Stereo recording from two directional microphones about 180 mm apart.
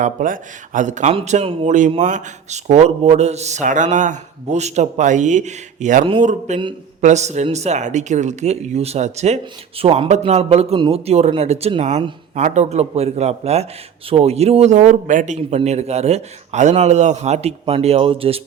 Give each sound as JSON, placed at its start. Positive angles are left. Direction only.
{"t": 0.0, "sound": "a man's voice", "side_deg": -45}